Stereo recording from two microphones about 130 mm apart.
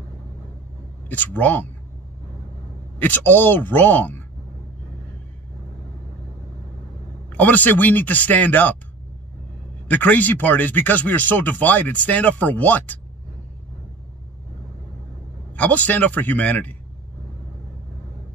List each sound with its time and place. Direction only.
1.0 s speech: 15° left (ahead or behind)
3.0 s speech: 15° left (ahead or behind)
7.3 s speech: 10° left (ahead or behind)
9.8 s speech: 10° left (ahead or behind)
15.5 s speech: 10° left (ahead or behind)